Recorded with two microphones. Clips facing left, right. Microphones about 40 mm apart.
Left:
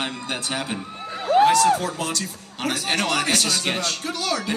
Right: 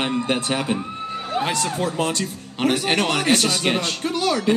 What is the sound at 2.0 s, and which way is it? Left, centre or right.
Speech, right.